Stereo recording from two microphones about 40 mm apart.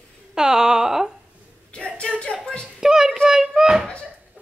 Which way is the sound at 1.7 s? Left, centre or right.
Left.